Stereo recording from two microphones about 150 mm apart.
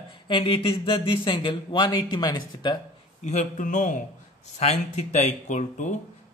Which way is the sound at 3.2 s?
55° left (ahead or behind).